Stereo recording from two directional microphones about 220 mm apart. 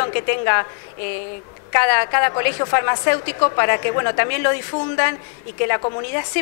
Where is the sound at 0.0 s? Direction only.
15° left (ahead or behind).